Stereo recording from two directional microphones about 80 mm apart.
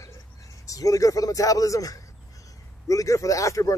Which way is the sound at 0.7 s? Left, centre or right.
Left.